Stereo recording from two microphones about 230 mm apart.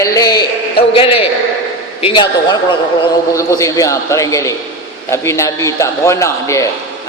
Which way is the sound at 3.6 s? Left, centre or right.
Centre.